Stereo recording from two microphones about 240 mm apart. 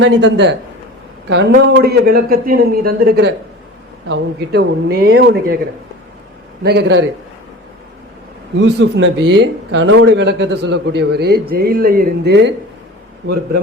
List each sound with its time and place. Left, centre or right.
0.0 s speech: right
6.6 s speech: right
8.6 s speech: right